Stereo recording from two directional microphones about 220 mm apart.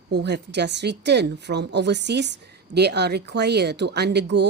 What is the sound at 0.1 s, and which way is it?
Speech, 50° right (ahead or behind).